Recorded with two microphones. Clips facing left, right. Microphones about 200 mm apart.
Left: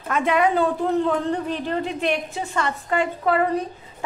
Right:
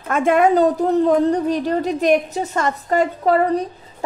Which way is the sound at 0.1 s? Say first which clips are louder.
Right 5 dB; 50° right (ahead or behind).